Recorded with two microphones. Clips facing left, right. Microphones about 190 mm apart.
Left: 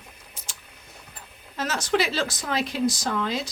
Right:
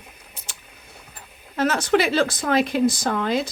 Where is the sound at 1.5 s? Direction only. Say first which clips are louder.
Right 5 dB; 60° right (ahead or behind).